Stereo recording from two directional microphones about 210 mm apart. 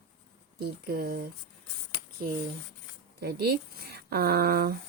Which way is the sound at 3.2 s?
45° right (ahead or behind).